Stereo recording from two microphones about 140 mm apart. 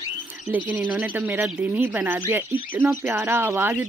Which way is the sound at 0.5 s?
10° right (ahead or behind).